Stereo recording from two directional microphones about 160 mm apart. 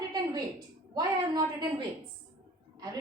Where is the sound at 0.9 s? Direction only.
25° right (ahead or behind).